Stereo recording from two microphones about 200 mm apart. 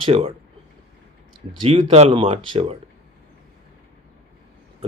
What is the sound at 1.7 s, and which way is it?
Speech, 30° right (ahead or behind).